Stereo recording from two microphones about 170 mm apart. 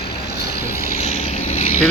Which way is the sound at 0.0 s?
75° left (ahead or behind).